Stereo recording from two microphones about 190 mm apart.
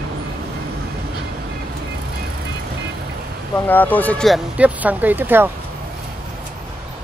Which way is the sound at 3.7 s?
10° left (ahead or behind).